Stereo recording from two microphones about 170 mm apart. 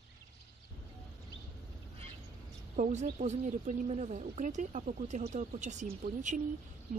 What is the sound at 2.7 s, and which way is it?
Speech, 45° right (ahead or behind).